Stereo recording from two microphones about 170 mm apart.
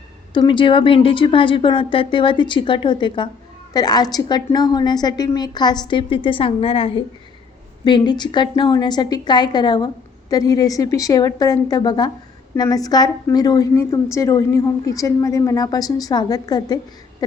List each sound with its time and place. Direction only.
0.3 s a woman's voice: 30° left (ahead or behind)